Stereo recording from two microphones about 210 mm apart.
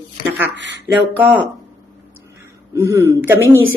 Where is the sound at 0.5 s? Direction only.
60° right (ahead or behind).